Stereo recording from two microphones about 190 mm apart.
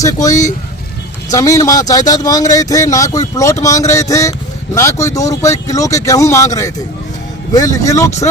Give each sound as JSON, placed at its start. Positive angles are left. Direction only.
{"t": 0.0, "sound": "speech", "side_deg": 15}